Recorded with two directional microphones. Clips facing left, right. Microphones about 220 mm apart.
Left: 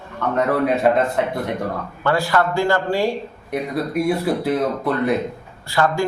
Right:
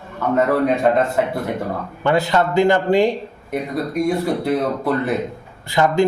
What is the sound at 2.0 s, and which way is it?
A man's voice, 20° right (ahead or behind).